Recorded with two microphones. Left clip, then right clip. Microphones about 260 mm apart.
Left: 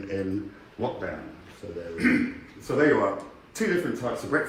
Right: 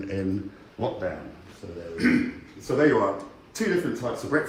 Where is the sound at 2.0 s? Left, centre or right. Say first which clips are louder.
Even; centre.